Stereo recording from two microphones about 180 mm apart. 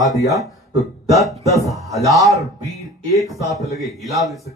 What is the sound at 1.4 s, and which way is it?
Speech, 20° right (ahead or behind).